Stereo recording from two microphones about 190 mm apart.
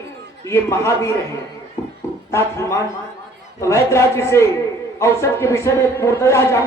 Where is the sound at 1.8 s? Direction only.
15° left (ahead or behind).